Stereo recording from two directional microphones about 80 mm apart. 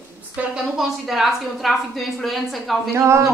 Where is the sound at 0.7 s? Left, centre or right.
Centre.